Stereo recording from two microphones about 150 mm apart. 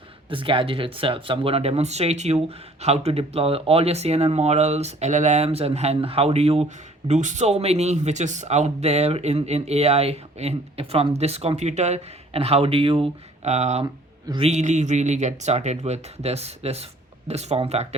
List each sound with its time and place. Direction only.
0.3 s speech: 35° right (ahead or behind)